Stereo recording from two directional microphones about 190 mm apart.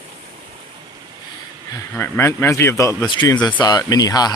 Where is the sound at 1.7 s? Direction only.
10° left (ahead or behind).